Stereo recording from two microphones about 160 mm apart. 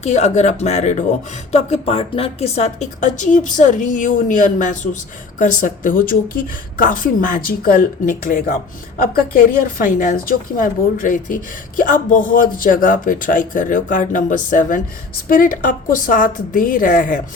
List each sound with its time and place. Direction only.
0.0 s a woman's voice: 45° left (ahead or behind)